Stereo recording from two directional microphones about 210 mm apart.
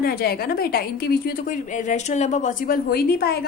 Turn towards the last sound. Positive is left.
turn(degrees=45)  # may be behind; listen again after turning